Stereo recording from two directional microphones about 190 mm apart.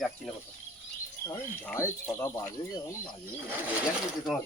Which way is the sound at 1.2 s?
15° left (ahead or behind).